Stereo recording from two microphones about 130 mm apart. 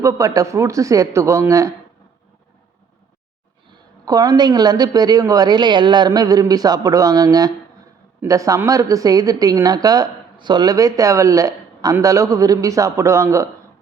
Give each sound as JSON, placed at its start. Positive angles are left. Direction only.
{"t": 0.0, "sound": "a woman's voice", "side_deg": -25}
{"t": 3.7, "sound": "a woman's voice", "side_deg": -30}